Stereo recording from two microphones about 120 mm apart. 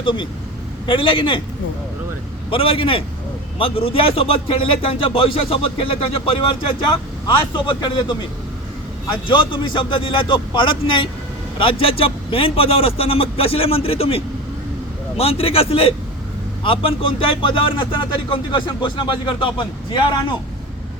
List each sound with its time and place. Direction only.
0.0 s speech: 45° left (ahead or behind)
2.5 s speech: 50° left (ahead or behind)
9.2 s speech: 40° left (ahead or behind)
15.2 s speech: 55° left (ahead or behind)